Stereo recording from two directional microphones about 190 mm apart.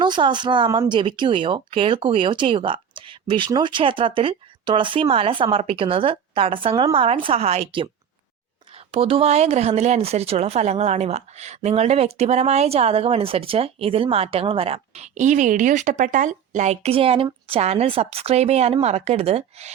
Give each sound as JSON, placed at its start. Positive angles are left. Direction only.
{"t": 0.0, "sound": "speech", "side_deg": -25}
{"t": 8.9, "sound": "speech", "side_deg": -30}